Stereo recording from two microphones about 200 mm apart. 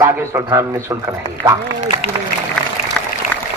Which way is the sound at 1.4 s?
10° left (ahead or behind).